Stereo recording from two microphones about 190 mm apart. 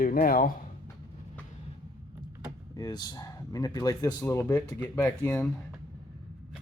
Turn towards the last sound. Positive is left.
turn(degrees=10)  # may be behind; listen again after turning